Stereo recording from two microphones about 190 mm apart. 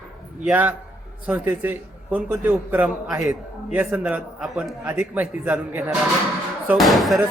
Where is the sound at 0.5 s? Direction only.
10° right (ahead or behind).